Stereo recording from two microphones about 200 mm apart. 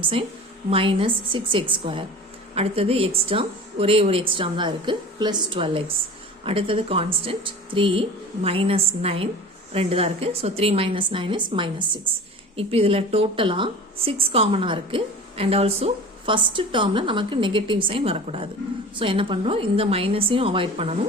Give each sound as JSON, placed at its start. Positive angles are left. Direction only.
{"t": 0.0, "sound": "a woman's voice", "side_deg": -30}